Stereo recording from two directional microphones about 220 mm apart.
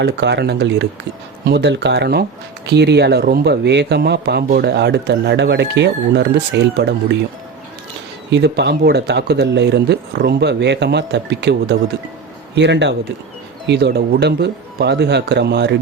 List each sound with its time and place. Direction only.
0.0 s speech: 50° right (ahead or behind)
8.3 s speech: 50° right (ahead or behind)